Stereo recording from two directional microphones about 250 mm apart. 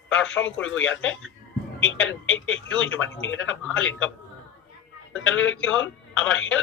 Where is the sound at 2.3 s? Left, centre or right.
Left.